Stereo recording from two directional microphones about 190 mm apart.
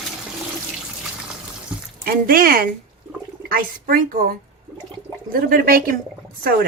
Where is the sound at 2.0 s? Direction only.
50° right (ahead or behind).